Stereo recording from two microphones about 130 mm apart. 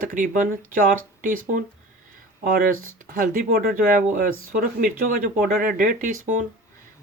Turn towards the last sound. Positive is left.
turn(degrees=-70)  # may be behind; listen again after turning